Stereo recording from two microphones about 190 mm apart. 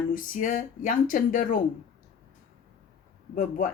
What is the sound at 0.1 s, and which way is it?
Speech, 45° left (ahead or behind).